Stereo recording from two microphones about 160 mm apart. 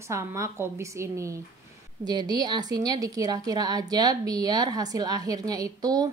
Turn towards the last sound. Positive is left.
turn(degrees=-20)  # may be behind; listen again after turning